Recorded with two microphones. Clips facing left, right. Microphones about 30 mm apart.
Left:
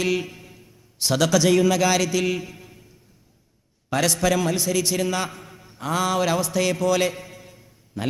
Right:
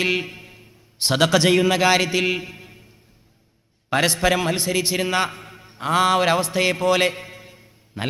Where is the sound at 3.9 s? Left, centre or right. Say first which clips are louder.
Right 2 dB; right.